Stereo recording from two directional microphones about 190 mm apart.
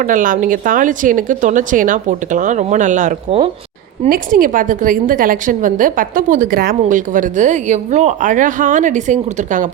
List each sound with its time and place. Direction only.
0.0 s a woman's voice: 45° right (ahead or behind)
4.1 s a woman's voice: 45° right (ahead or behind)